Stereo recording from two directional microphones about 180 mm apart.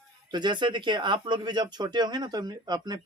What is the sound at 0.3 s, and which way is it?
Speech, 25° right (ahead or behind).